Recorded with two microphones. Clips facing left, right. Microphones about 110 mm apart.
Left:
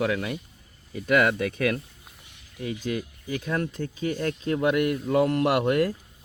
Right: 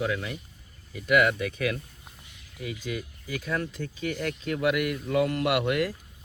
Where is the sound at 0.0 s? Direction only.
80° left.